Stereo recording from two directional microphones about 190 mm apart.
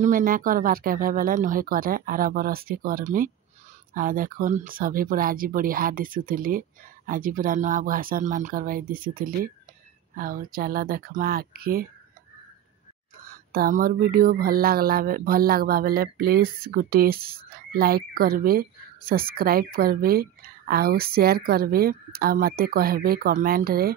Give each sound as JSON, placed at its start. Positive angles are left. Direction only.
{"t": 0.0, "sound": "speech", "side_deg": -45}
{"t": 13.3, "sound": "speech", "side_deg": -50}